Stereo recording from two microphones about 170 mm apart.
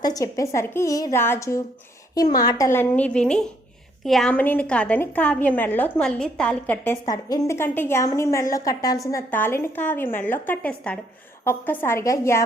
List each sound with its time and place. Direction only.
0.0 s a woman's voice: 20° left (ahead or behind)
7.0 s a woman's voice: 20° left (ahead or behind)